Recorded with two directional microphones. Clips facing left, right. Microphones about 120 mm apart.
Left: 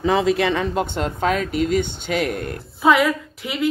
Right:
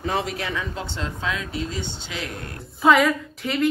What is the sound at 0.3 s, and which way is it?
Speech, 90° left.